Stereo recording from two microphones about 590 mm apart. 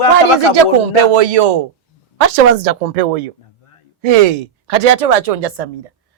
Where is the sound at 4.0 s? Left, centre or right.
Right.